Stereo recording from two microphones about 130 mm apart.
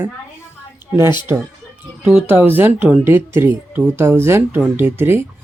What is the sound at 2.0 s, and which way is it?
Speech, 15° right (ahead or behind).